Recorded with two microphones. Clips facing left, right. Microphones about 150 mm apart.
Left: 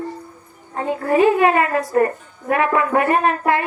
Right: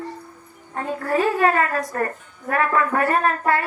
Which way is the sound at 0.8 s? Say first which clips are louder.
Left 5 dB; 15° left (ahead or behind).